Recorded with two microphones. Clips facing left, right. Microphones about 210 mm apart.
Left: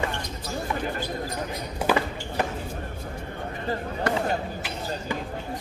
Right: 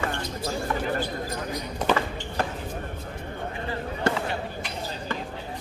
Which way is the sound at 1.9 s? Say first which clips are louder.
Left 1 dB; 5° left (ahead or behind).